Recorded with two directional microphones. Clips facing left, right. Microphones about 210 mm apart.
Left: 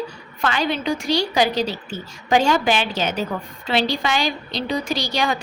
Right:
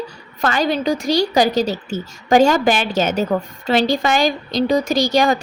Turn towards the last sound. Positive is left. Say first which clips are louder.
# right 7 dB
turn(degrees=-45)  # may be behind; listen again after turning